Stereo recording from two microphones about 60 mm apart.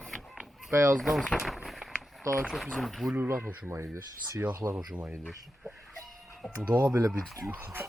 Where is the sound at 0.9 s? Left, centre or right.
Centre.